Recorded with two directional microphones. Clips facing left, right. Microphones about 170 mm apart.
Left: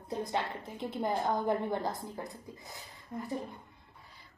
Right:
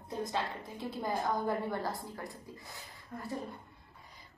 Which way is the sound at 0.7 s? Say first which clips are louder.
Left 3 dB; 20° left (ahead or behind).